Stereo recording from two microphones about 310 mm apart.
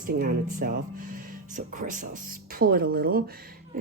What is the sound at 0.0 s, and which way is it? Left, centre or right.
Speech, right.